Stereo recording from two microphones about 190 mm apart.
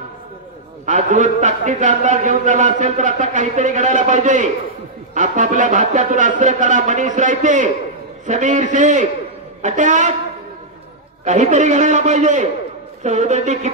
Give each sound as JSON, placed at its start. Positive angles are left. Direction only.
{"t": 0.8, "sound": "a man's voice", "side_deg": -40}
{"t": 11.2, "sound": "a man's voice", "side_deg": -40}